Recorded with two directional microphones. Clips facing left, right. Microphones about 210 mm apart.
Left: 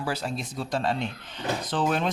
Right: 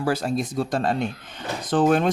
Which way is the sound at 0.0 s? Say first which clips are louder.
Right 7 dB; 45° right (ahead or behind).